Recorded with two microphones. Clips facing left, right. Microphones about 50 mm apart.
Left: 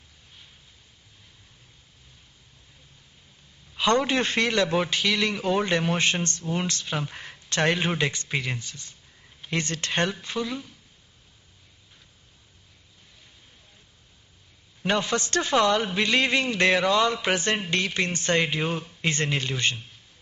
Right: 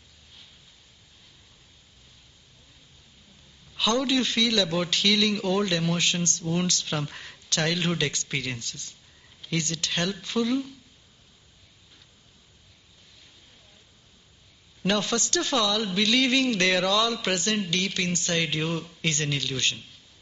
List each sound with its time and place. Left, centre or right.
3.7 s a man's voice: left
10.2 s speech: centre
14.8 s a man's voice: left
19.1 s a man's voice: left